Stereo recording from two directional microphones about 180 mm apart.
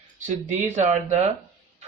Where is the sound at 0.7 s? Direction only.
40° right (ahead or behind).